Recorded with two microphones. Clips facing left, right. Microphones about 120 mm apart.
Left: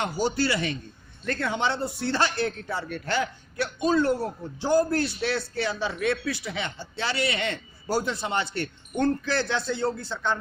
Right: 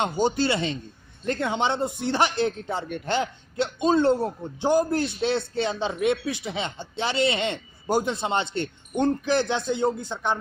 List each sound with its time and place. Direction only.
0.0 s speech: 20° right (ahead or behind)